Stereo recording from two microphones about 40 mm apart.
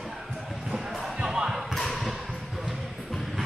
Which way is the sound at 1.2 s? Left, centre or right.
Centre.